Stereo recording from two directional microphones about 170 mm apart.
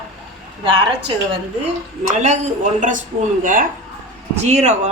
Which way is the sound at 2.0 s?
45° right (ahead or behind).